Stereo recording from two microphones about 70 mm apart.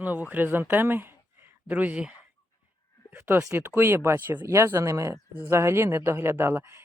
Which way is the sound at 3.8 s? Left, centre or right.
Right.